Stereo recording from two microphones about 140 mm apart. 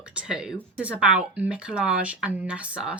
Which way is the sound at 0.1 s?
5° right (ahead or behind).